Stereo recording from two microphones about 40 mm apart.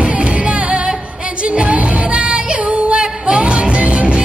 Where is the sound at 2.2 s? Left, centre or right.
Right.